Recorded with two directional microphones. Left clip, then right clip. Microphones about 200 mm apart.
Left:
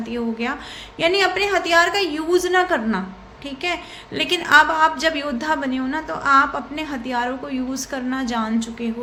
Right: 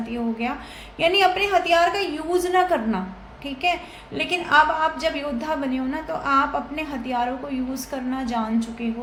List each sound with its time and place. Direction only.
0.1 s a woman's voice: 20° left (ahead or behind)